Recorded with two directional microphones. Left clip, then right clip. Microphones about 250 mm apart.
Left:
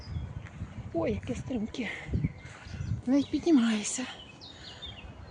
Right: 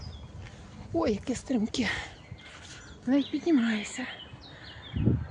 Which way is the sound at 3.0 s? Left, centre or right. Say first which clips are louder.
Even; centre.